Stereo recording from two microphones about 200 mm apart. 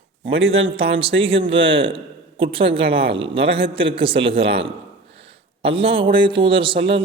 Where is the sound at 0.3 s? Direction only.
75° right (ahead or behind).